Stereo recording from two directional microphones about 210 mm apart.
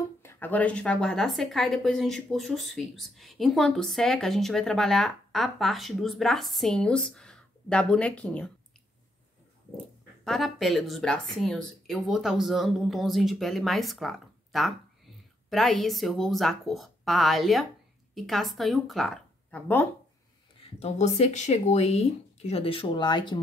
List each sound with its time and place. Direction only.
0.2 s a woman's voice: 10° left (ahead or behind)
10.2 s a woman's voice: centre (ahead or behind)
20.8 s speech: 30° left (ahead or behind)